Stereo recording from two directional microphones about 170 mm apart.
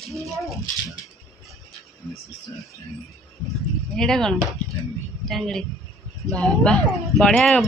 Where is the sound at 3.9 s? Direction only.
5° left (ahead or behind).